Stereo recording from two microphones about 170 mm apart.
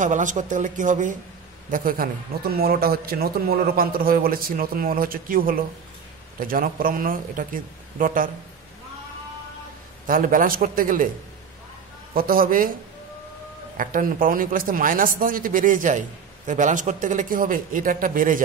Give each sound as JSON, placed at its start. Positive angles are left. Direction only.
{"t": 0.0, "sound": "a man's voice", "side_deg": -50}
{"t": 10.0, "sound": "speech", "side_deg": -55}
{"t": 12.1, "sound": "speech", "side_deg": -60}
{"t": 13.7, "sound": "a man's voice", "side_deg": -55}